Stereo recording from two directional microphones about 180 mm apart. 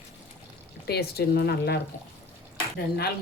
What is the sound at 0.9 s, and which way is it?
Speech, 60° left (ahead or behind).